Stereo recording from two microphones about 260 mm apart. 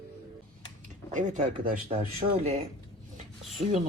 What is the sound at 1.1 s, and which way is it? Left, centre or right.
Speech, right.